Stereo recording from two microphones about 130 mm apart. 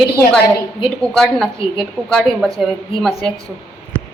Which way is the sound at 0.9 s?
5° left (ahead or behind).